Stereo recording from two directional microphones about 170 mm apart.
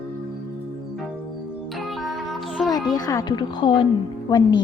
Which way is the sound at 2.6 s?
20° left (ahead or behind).